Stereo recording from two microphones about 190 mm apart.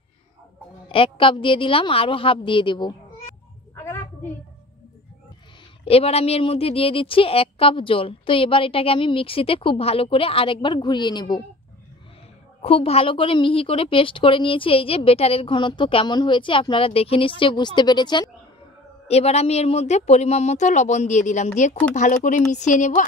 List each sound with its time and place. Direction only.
0.8 s a woman's voice: 30° left (ahead or behind)
3.7 s a sound: 10° left (ahead or behind)
5.9 s a woman's voice: 30° left (ahead or behind)
12.6 s a woman's voice: 30° left (ahead or behind)
19.0 s a woman's voice: 35° left (ahead or behind)